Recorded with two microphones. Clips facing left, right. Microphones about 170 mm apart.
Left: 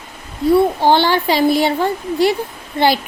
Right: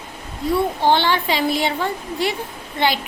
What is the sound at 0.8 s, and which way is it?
A woman's voice, 35° left (ahead or behind).